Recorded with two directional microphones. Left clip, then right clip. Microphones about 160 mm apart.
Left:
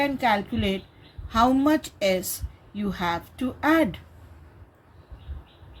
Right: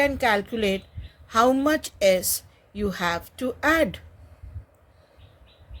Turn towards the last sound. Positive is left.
turn(degrees=-60)  # may be behind; listen again after turning